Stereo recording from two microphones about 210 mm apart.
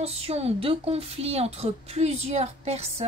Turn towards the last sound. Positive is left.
turn(degrees=-30)  # may be behind; listen again after turning